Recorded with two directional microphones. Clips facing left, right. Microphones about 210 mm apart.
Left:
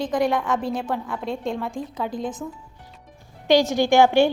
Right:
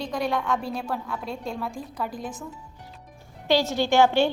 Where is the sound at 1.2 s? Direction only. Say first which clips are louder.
Left 8 dB; 90° left.